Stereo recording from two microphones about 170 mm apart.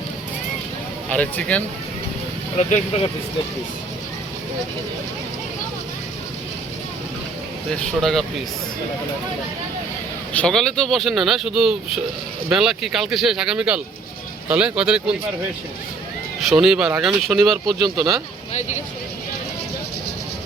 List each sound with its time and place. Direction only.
1.1 s speech: 10° left (ahead or behind)
2.6 s speech: 35° left (ahead or behind)
7.8 s speech: centre (ahead or behind)
10.3 s speech: 5° left (ahead or behind)
16.5 s speech: centre (ahead or behind)
17.7 s speech: 25° right (ahead or behind)